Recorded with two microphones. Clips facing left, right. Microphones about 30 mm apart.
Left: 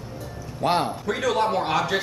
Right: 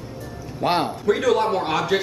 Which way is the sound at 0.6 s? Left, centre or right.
Centre.